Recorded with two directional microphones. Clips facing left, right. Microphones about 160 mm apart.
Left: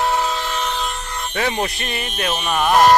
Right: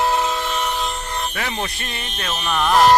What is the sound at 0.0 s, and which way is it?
Train, 5° right (ahead or behind).